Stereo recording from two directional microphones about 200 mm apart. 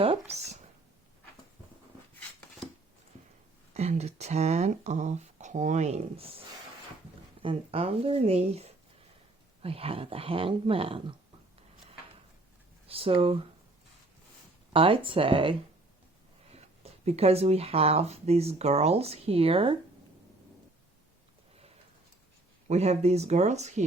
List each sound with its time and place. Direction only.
0.0 s speech: 30° right (ahead or behind)
3.8 s speech: 35° right (ahead or behind)
7.4 s speech: 30° right (ahead or behind)
12.9 s speech: 30° right (ahead or behind)
14.7 s speech: 25° right (ahead or behind)
22.7 s speech: 30° right (ahead or behind)